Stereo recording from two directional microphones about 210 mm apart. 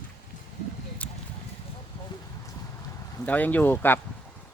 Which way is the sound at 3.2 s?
10° left (ahead or behind).